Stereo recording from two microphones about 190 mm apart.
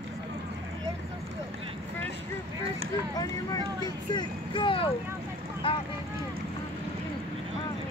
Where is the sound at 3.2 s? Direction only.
20° left (ahead or behind).